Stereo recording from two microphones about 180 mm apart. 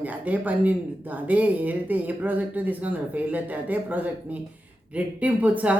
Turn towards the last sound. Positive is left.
turn(degrees=-10)  # may be behind; listen again after turning